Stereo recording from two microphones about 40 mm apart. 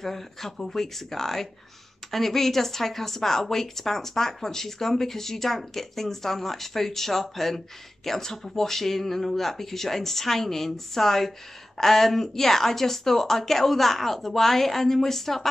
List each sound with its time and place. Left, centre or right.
0.0 s speech: centre